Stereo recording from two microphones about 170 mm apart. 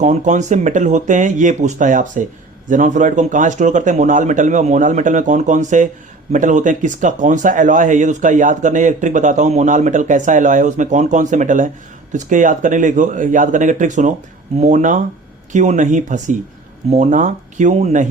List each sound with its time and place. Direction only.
0.0 s speech: 45° right (ahead or behind)